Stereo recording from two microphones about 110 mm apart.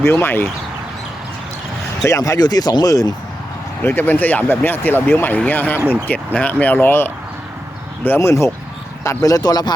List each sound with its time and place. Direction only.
0.0 s speech: 20° left (ahead or behind)
2.0 s speech: 30° left (ahead or behind)
3.8 s speech: 15° left (ahead or behind); by 9.7 s 40° left (ahead or behind)